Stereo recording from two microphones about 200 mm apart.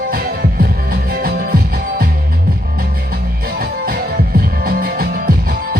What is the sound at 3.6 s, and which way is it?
Music, 50° right (ahead or behind).